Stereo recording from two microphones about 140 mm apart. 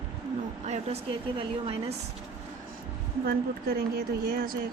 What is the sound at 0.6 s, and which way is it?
Speech, 55° right (ahead or behind).